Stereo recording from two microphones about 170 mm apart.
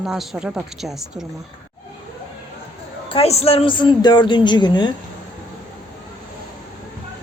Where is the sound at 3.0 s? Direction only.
35° left (ahead or behind).